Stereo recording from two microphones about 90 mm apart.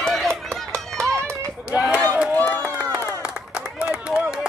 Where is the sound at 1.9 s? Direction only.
10° right (ahead or behind).